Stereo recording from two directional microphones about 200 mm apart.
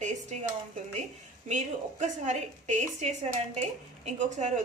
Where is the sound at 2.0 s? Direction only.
35° right (ahead or behind).